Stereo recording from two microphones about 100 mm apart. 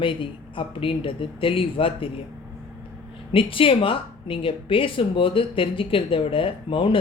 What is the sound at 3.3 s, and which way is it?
A woman's voice, 65° left (ahead or behind).